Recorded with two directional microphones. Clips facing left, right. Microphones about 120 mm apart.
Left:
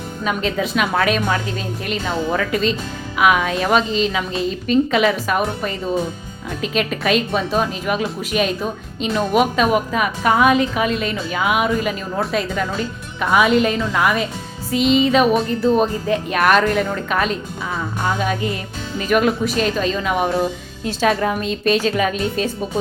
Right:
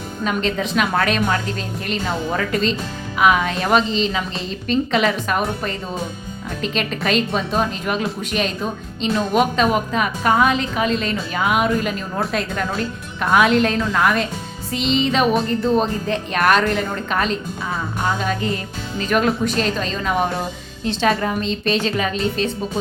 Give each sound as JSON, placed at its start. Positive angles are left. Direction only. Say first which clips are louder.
{"t": 0.3, "sound": "a woman's voice", "louder": "left 1 dB", "side_deg": 5}
{"t": 2.5, "sound": "a woman's voice", "louder": "left 1 dB", "side_deg": 0}
{"t": 19.0, "sound": "a woman's voice", "louder": "left 2 dB", "side_deg": 5}